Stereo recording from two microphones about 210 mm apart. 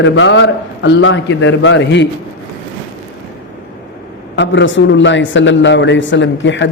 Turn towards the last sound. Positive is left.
turn(degrees=60)  # may be behind; listen again after turning